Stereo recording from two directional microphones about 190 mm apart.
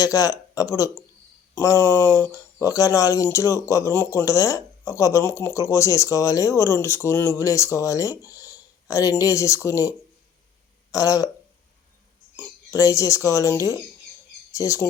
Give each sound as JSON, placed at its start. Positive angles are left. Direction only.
{"t": 0.0, "sound": "speech", "side_deg": 15}
{"t": 10.9, "sound": "speech", "side_deg": 20}
{"t": 12.4, "sound": "speech", "side_deg": 15}